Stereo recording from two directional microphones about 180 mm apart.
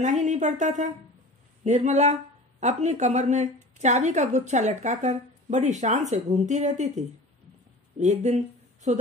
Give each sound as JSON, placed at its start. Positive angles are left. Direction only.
{"t": 0.0, "sound": "a woman's voice", "side_deg": -40}